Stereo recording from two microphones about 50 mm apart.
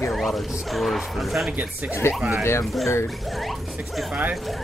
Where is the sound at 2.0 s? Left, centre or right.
Left.